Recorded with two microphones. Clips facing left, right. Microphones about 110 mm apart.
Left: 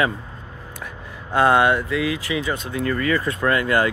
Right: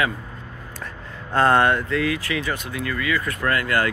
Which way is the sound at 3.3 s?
20° left (ahead or behind).